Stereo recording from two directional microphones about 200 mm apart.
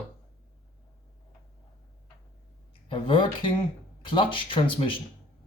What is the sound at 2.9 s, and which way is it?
Speech, 25° left (ahead or behind).